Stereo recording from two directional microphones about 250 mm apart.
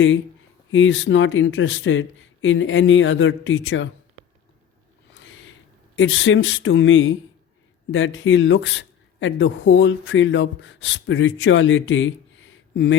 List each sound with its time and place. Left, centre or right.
0.7 s speech: left
6.0 s speech: left